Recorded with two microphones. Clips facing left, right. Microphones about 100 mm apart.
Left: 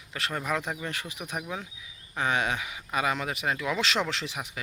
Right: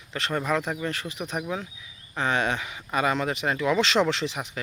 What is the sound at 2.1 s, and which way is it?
Speech, 10° left (ahead or behind).